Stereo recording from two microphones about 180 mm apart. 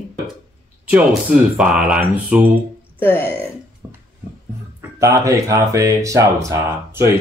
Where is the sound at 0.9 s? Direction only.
5° right (ahead or behind).